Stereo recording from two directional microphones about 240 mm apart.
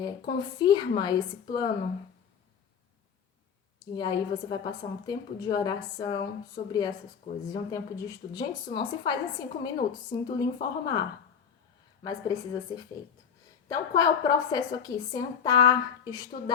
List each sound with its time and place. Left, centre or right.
0.0 s a woman's voice: centre
3.9 s a woman's voice: centre
12.0 s a woman's voice: centre